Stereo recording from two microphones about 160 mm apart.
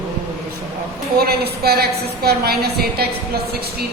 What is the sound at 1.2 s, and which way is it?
A woman's voice, 75° right (ahead or behind).